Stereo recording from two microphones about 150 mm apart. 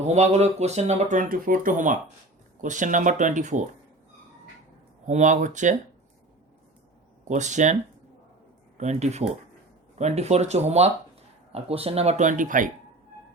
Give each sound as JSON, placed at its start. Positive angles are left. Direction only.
{"t": 0.0, "sound": "speech", "side_deg": -50}
{"t": 5.0, "sound": "speech", "side_deg": -55}
{"t": 7.3, "sound": "speech", "side_deg": -55}
{"t": 8.8, "sound": "speech", "side_deg": -50}